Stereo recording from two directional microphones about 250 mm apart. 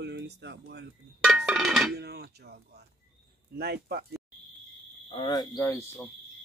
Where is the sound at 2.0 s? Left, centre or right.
Right.